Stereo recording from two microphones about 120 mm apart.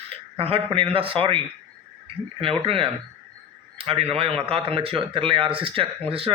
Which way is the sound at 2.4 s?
50° right (ahead or behind).